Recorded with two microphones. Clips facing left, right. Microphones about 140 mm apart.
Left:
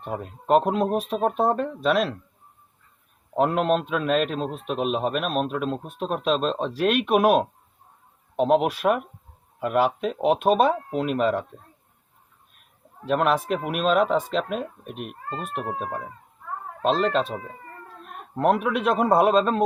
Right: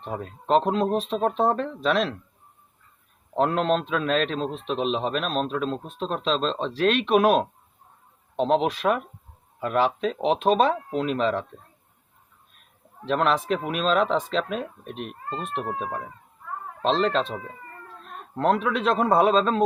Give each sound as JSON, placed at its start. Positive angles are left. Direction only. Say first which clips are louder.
{"t": 0.0, "sound": "a man's voice", "louder": "left 1 dB", "side_deg": 5}
{"t": 3.3, "sound": "a man's voice", "louder": "left 1 dB", "side_deg": 5}
{"t": 13.1, "sound": "a man's voice", "louder": "left 1 dB", "side_deg": 5}